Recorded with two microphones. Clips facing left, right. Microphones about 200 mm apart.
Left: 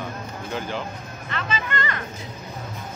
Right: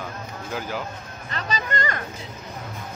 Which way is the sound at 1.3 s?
40° right (ahead or behind).